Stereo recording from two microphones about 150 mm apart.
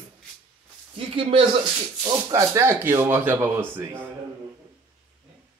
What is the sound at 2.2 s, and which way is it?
Speech, 20° right (ahead or behind).